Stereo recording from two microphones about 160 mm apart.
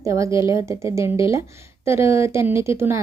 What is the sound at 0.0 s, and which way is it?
A woman's voice, 20° right (ahead or behind).